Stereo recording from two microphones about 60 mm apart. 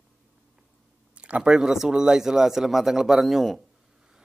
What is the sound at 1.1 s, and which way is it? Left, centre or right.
A man's voice, centre.